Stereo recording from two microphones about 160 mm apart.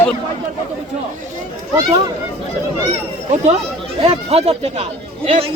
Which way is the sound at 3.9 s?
35° right (ahead or behind).